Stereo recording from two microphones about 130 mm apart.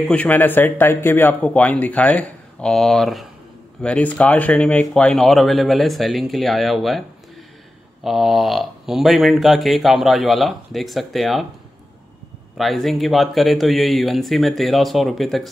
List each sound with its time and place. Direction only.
0.1 s speech: 15° left (ahead or behind)
12.5 s speech: centre (ahead or behind)